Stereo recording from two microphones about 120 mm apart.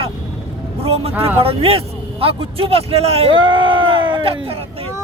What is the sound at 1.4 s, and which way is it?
Speech, 55° right (ahead or behind).